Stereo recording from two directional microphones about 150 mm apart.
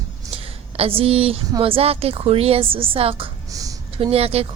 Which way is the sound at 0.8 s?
40° right (ahead or behind).